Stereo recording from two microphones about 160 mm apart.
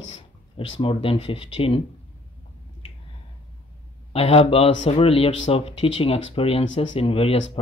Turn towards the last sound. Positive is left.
turn(degrees=35)  # may be behind; listen again after turning